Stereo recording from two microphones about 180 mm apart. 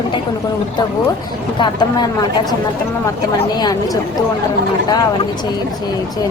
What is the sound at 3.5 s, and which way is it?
Speech, 25° left (ahead or behind).